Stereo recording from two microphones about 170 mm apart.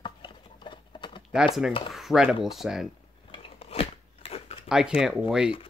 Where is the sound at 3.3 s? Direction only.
35° left (ahead or behind).